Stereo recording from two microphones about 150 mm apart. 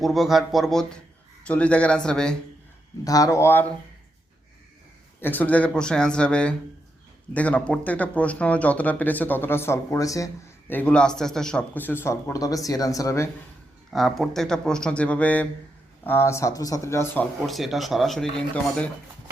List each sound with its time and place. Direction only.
0.0 s speech: centre (ahead or behind)
3.0 s speech: 25° left (ahead or behind)
5.2 s speech: 10° left (ahead or behind)
13.9 s speech: centre (ahead or behind); by 17.2 s 15° left (ahead or behind)
17.4 s speech: centre (ahead or behind)